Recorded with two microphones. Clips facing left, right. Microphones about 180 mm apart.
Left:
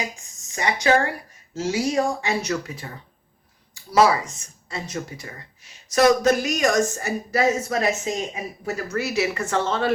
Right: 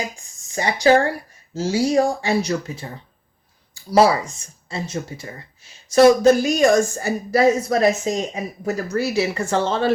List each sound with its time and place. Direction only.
0.5 s speech: 30° right (ahead or behind)
3.9 s speech: 30° right (ahead or behind)